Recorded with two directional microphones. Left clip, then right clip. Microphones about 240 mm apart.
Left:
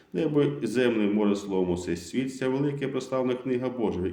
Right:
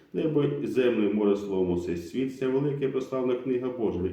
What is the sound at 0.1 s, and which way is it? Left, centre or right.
A man's voice, left.